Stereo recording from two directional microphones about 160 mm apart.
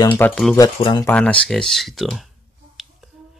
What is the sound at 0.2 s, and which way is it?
Speech, 5° left (ahead or behind).